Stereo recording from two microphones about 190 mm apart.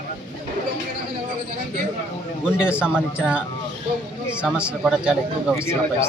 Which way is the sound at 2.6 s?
5° right (ahead or behind).